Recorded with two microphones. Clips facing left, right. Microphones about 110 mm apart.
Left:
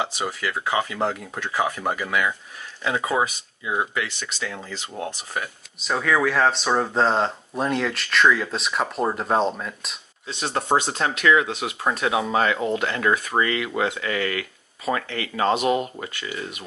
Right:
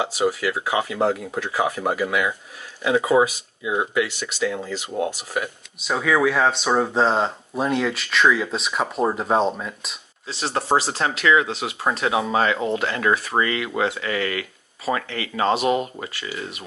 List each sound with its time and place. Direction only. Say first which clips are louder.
0.0 s speech: right 5 dB; 5° right (ahead or behind)
12.0 s speech: right 1 dB; 5° right (ahead or behind)
14.0 s speech: right 1 dB; 20° right (ahead or behind)
14.9 s speech: right 1 dB; 5° right (ahead or behind)